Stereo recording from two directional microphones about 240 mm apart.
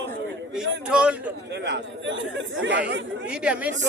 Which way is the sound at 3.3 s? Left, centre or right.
Centre.